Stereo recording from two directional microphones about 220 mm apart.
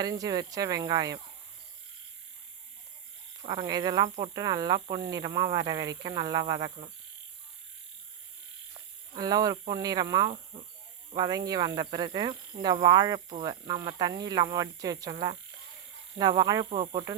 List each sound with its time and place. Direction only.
0.0 s speech: 15° right (ahead or behind)
3.4 s speech: 20° right (ahead or behind)
9.1 s speech: 15° right (ahead or behind)